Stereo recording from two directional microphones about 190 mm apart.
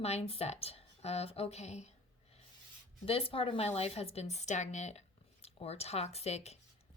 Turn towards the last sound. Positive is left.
turn(degrees=35)  # may be behind; listen again after turning